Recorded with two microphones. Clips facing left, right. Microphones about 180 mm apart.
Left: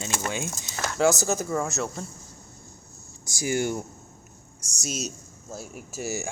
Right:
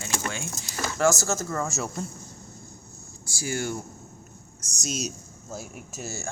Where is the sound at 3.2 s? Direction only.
20° left (ahead or behind).